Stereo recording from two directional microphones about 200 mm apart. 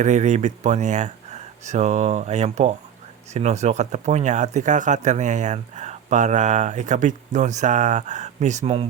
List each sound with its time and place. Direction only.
0.0 s speech: 35° right (ahead or behind)